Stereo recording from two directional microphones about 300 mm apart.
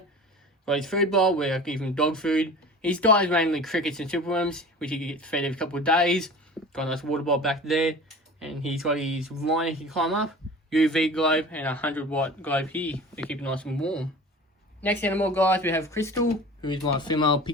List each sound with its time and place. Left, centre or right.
0.6 s speech: centre